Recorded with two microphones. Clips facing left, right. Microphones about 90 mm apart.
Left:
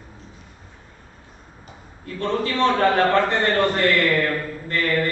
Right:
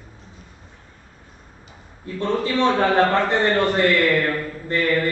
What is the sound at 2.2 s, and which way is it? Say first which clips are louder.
A man's voice: right 1 dB; 15° right (ahead or behind).